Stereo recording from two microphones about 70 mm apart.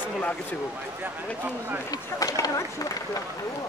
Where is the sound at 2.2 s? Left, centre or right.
Left.